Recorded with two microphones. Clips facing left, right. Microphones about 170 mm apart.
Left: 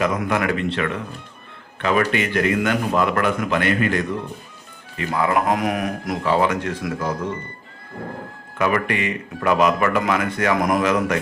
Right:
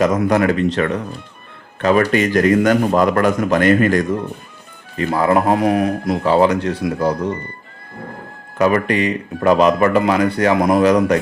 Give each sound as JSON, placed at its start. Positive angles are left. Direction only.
{"t": 0.0, "sound": "speech", "side_deg": -40}
{"t": 8.5, "sound": "speech", "side_deg": -35}